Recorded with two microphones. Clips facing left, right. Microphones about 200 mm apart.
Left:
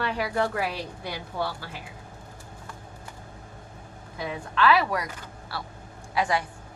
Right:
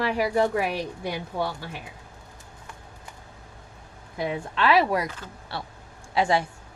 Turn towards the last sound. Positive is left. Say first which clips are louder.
# right 3 dB
turn(degrees=-25)  # may be behind; listen again after turning